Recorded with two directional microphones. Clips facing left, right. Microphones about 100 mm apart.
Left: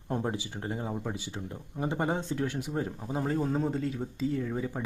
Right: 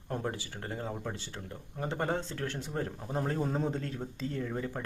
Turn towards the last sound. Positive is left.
turn(degrees=5)  # may be behind; listen again after turning